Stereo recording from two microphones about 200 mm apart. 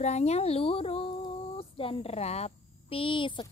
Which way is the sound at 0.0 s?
35° left (ahead or behind).